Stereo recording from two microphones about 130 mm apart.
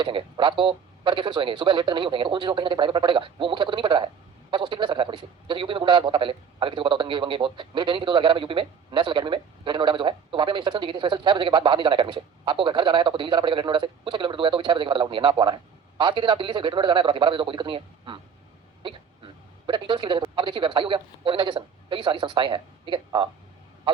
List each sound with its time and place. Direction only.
0.0 s a man's voice: 40° right (ahead or behind)